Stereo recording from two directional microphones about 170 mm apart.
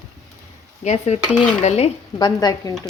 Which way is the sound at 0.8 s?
40° left (ahead or behind).